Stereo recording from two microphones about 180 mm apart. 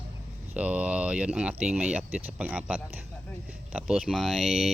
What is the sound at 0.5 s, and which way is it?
Speech, 5° right (ahead or behind).